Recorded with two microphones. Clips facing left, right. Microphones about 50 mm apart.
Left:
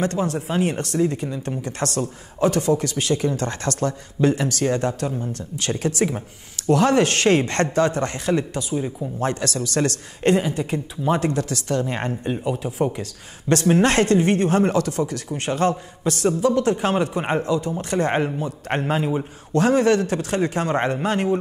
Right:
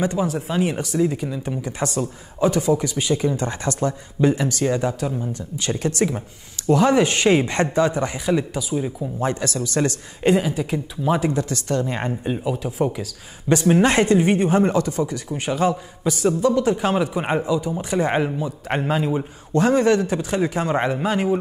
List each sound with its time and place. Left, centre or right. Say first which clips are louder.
0.0 s speech: right 1 dB; centre